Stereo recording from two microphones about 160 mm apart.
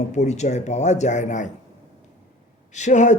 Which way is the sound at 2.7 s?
50° left (ahead or behind).